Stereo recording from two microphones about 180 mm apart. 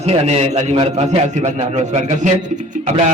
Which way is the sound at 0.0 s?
35° right (ahead or behind).